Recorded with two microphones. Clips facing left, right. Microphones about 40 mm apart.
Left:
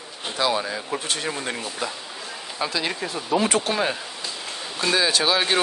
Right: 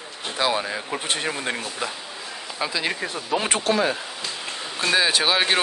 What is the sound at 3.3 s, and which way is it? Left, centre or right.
Speech, right.